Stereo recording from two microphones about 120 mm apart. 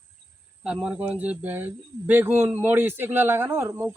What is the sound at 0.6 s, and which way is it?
Speech, 10° right (ahead or behind).